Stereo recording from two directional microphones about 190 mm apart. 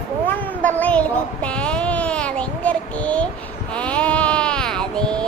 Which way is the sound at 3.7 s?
5° left (ahead or behind).